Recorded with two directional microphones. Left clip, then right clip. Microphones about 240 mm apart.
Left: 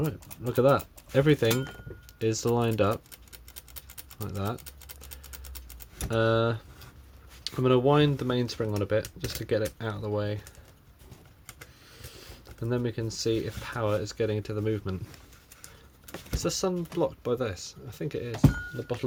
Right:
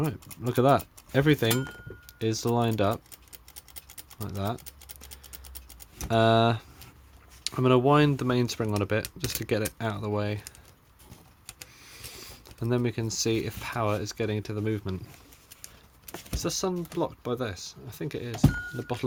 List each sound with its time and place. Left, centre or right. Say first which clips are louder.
0.0 s speech: right 1 dB; right
4.2 s speech: right 1 dB; centre
6.1 s speech: right 3 dB; right
11.9 s speech: right 5 dB; right
16.4 s speech: left 1 dB; centre